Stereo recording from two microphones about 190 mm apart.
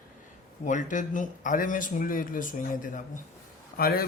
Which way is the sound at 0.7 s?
40° left (ahead or behind).